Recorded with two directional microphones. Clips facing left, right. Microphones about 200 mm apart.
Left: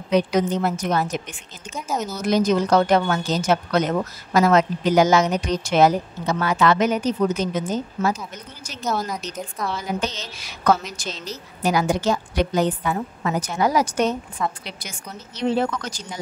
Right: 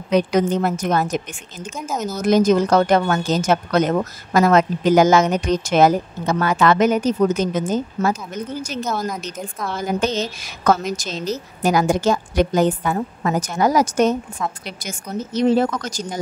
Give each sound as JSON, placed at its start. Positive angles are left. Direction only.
{"t": 0.1, "sound": "a woman's voice", "side_deg": -55}
{"t": 8.8, "sound": "a woman's voice", "side_deg": 5}
{"t": 9.7, "sound": "a woman's voice", "side_deg": -50}